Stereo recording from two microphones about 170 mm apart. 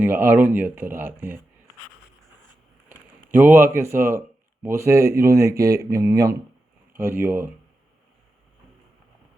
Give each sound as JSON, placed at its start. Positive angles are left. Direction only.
{"t": 0.0, "sound": "speech", "side_deg": -10}
{"t": 3.3, "sound": "speech", "side_deg": -15}